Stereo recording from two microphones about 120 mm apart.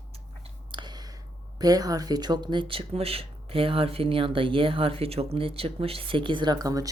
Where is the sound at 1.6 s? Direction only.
30° right (ahead or behind).